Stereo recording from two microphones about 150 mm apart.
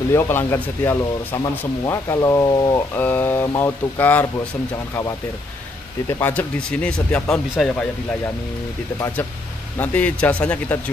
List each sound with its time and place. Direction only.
0.1 s speech: 15° left (ahead or behind)
3.0 s speech: 10° left (ahead or behind)
6.0 s speech: 15° left (ahead or behind)
9.8 s speech: 10° left (ahead or behind)